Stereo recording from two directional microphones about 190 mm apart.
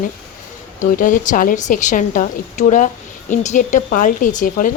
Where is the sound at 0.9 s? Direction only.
45° left (ahead or behind).